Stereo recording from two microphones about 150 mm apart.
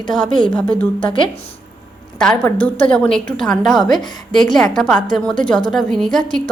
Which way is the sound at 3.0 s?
5° left (ahead or behind).